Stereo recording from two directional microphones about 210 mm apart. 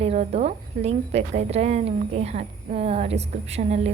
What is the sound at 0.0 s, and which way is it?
A woman's voice, 30° right (ahead or behind).